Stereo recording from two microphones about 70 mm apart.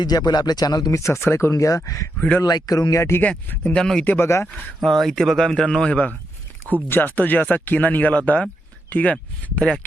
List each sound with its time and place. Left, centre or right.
0.0 s speech: left
2.4 s speech: left
3.2 s speech: left
4.8 s speech: centre
6.8 s speech: left; by 9.8 s centre